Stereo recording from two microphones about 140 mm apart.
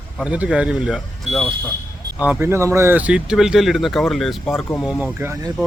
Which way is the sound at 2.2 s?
15° right (ahead or behind).